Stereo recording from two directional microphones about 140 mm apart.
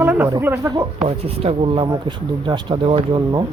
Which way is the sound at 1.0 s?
45° right (ahead or behind).